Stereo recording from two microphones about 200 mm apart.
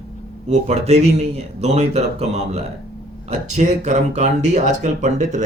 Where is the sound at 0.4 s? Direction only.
35° right (ahead or behind).